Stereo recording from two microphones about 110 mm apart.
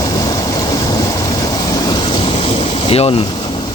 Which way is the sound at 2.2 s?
60° left (ahead or behind).